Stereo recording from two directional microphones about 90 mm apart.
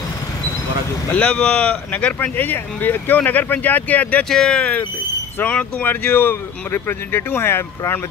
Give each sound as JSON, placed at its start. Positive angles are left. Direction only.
{"t": 1.0, "sound": "speech", "side_deg": 15}
{"t": 4.3, "sound": "speech", "side_deg": 5}